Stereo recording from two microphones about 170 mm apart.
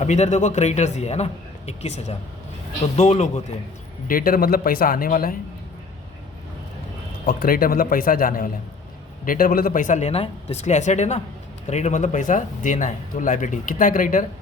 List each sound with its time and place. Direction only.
0.0 s speech: 45° left (ahead or behind)
4.1 s speech: 60° left (ahead or behind)
7.3 s speech: 60° left (ahead or behind)